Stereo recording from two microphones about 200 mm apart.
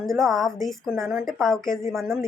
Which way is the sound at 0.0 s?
Centre (ahead or behind).